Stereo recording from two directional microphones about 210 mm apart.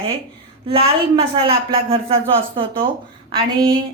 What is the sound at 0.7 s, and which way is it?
A woman's voice, 25° right (ahead or behind).